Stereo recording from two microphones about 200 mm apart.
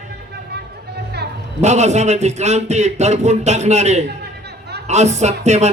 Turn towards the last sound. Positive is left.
turn(degrees=-35)  # may be behind; listen again after turning